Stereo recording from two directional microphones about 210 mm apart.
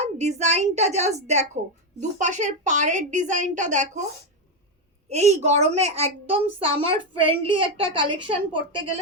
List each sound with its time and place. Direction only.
0.0 s speech: 30° right (ahead or behind)
5.0 s a woman's voice: 30° right (ahead or behind)